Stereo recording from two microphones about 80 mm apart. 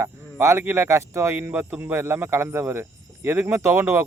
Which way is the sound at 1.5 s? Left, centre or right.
Right.